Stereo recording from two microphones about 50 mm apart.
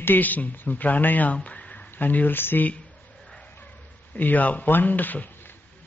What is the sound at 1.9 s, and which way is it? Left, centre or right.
Speech, left.